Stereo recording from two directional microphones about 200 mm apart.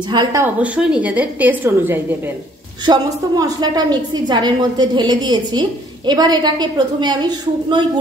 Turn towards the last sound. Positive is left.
turn(degrees=-20)  # may be behind; listen again after turning